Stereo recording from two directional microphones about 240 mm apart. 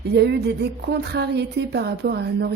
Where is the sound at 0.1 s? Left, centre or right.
Right.